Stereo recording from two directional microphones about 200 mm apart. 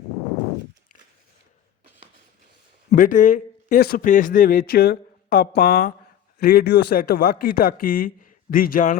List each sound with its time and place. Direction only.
2.9 s speech: 40° left (ahead or behind)